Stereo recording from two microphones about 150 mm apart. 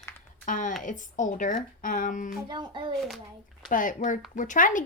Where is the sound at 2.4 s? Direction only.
30° right (ahead or behind).